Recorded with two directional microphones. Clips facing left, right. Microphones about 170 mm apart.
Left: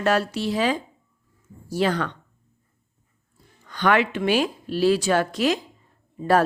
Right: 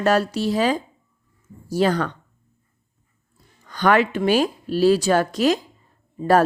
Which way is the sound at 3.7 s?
40° right (ahead or behind).